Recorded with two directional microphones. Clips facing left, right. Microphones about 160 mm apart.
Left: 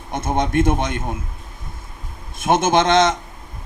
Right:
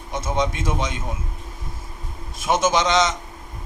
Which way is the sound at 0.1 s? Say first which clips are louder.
Left 3 dB; 55° left (ahead or behind).